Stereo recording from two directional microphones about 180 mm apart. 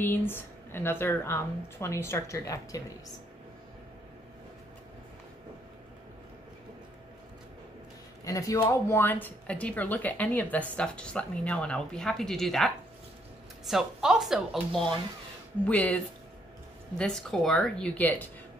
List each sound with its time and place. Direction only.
0.0 s speech: 10° left (ahead or behind)
8.3 s a woman's voice: 15° left (ahead or behind)
17.0 s a woman's voice: 5° left (ahead or behind)